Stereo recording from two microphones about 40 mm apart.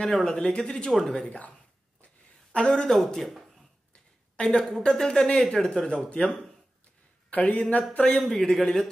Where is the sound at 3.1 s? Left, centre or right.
Centre.